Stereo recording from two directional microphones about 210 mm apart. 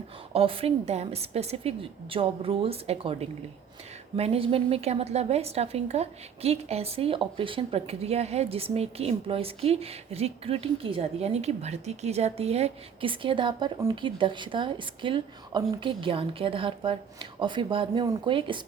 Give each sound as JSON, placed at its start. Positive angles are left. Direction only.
{"t": 0.3, "sound": "a woman's voice", "side_deg": -25}